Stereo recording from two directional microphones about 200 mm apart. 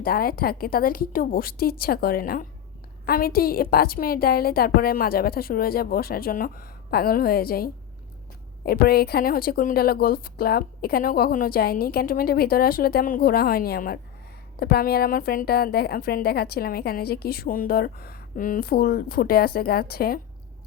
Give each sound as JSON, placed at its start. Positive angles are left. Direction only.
{"t": 0.0, "sound": "a woman's voice", "side_deg": 45}